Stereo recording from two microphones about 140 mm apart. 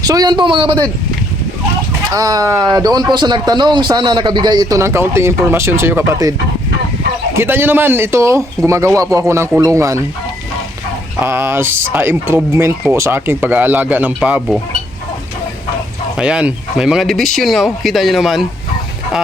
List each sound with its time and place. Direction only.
0.0 s a man's voice: 25° right (ahead or behind)
2.0 s speech: 25° right (ahead or behind)
7.3 s speech: 15° right (ahead or behind)
11.2 s speech: 15° right (ahead or behind)
16.1 s speech: 5° right (ahead or behind)